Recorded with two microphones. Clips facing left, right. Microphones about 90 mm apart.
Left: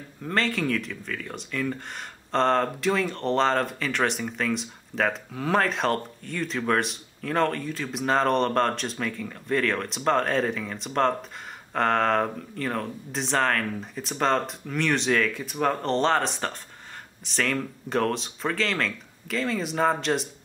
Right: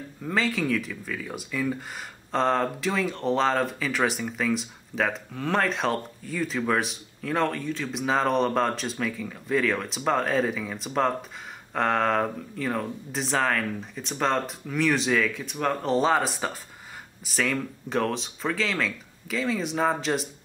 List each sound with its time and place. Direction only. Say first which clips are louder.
0.2 s speech: even; centre (ahead or behind)